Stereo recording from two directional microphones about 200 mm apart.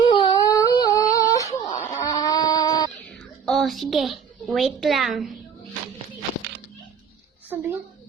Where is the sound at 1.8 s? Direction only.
15° left (ahead or behind).